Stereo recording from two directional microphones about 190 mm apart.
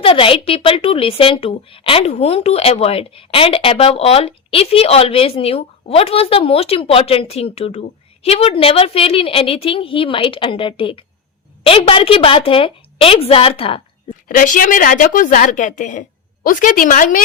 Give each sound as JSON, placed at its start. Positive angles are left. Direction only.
{"t": 0.0, "sound": "a woman's voice", "side_deg": 30}
{"t": 14.3, "sound": "a woman's voice", "side_deg": 45}